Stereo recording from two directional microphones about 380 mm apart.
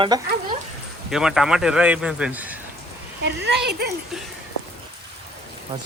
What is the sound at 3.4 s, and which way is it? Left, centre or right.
Speech, right.